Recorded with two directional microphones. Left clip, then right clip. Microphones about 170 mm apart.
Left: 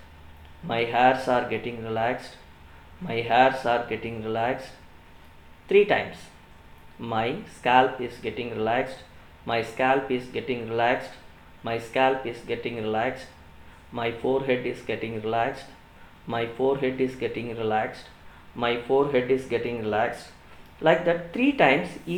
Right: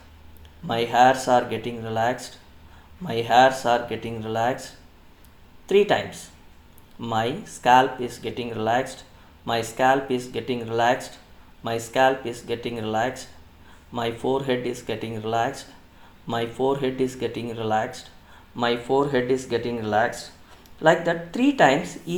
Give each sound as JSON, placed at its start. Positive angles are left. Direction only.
{"t": 0.7, "sound": "speech", "side_deg": -55}
{"t": 5.6, "sound": "speech", "side_deg": -50}
{"t": 7.0, "sound": "speech", "side_deg": -50}